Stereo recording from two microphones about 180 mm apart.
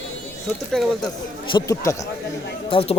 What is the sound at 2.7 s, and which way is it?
Speech, 30° left (ahead or behind).